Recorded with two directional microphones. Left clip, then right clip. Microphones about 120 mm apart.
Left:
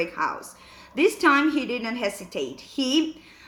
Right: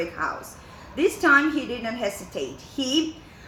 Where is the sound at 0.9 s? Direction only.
35° left (ahead or behind).